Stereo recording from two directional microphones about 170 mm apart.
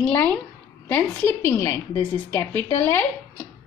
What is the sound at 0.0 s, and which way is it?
A woman's voice, 10° left (ahead or behind).